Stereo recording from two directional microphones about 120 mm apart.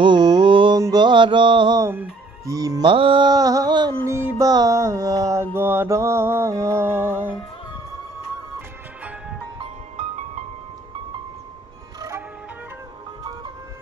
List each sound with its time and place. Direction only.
0.0 s mantra: 35° right (ahead or behind)
0.7 s mantra: 30° right (ahead or behind)
1.8 s speech: 25° right (ahead or behind)
2.9 s music: 45° right (ahead or behind)
4.4 s mantra: 30° right (ahead or behind)
9.9 s music: 70° right (ahead or behind)